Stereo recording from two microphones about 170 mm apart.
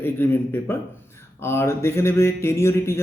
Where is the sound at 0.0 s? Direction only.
15° left (ahead or behind).